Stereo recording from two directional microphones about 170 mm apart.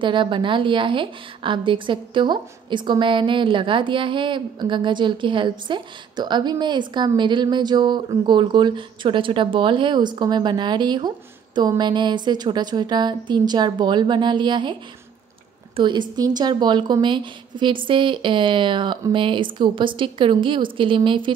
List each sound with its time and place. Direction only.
0.0 s a woman's voice: 30° right (ahead or behind)